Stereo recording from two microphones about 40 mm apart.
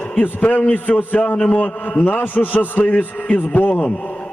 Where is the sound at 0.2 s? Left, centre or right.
Left.